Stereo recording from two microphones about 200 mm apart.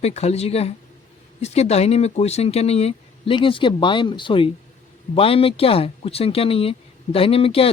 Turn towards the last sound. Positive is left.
turn(degrees=30)  # may be behind; listen again after turning